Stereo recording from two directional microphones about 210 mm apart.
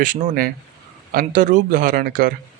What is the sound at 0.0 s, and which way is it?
Speech, 35° right (ahead or behind).